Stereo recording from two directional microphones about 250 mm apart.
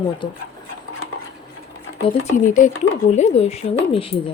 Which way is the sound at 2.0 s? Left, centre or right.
Left.